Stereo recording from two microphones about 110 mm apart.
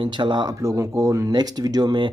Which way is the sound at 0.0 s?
45° right (ahead or behind).